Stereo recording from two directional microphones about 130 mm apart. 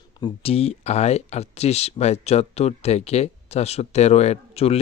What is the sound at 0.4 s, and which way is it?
Speech, 50° left (ahead or behind).